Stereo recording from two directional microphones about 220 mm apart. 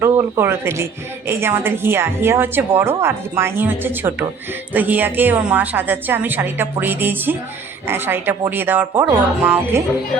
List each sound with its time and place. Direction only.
0.0 s a woman's voice: 10° right (ahead or behind)